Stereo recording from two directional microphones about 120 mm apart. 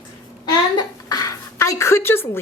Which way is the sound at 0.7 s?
30° left (ahead or behind).